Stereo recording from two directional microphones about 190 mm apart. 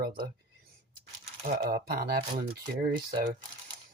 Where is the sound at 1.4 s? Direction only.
50° right (ahead or behind).